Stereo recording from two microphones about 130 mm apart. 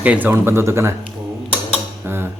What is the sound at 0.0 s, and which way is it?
Speech, 10° right (ahead or behind).